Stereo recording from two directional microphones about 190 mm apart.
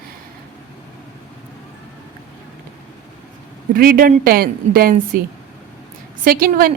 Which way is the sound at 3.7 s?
50° right (ahead or behind).